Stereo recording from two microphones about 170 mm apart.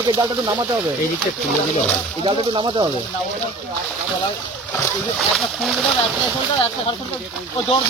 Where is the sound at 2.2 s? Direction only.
30° right (ahead or behind).